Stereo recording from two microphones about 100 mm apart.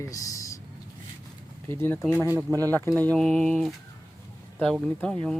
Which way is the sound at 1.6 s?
25° left (ahead or behind).